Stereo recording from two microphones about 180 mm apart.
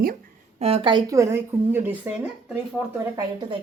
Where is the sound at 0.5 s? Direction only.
35° right (ahead or behind); by 2.2 s 10° right (ahead or behind).